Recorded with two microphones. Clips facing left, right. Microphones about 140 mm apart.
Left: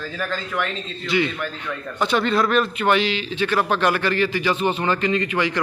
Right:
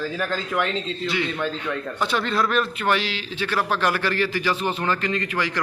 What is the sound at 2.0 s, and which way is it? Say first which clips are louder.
Speech: left 4 dB; centre (ahead or behind).